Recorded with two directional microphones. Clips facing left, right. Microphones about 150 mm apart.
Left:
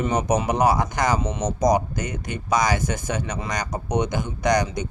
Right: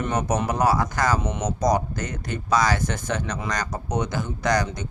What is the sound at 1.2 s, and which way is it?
Speech, 5° right (ahead or behind).